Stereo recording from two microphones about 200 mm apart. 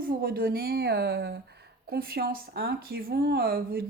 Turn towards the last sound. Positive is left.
turn(degrees=-50)  # may be behind; listen again after turning